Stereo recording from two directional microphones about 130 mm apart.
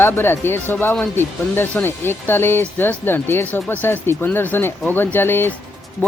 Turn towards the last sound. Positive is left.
turn(degrees=15)  # may be behind; listen again after turning